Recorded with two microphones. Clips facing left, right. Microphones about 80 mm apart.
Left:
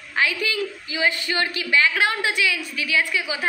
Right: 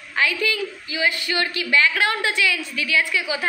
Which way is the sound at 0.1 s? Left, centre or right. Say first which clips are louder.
Right 1 dB; left.